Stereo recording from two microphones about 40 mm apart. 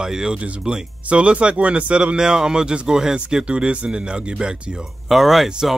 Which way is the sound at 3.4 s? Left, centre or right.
Right.